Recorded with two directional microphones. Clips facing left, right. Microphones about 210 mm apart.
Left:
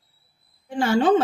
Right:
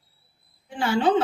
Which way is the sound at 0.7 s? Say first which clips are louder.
Left 4 dB; 45° left (ahead or behind).